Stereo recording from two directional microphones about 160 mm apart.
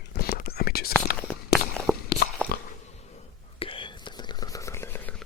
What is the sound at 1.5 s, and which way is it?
Walk, 80° left.